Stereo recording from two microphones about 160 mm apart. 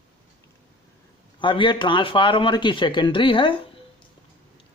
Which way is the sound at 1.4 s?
30° left (ahead or behind).